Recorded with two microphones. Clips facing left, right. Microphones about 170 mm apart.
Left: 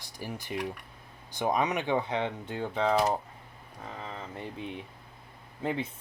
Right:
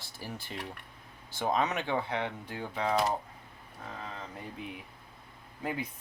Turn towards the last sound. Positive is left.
turn(degrees=25)  # may be behind; listen again after turning